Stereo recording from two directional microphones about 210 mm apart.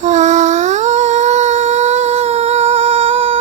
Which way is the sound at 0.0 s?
35° right (ahead or behind).